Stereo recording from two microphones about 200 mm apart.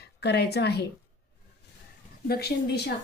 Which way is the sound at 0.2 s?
55° left (ahead or behind).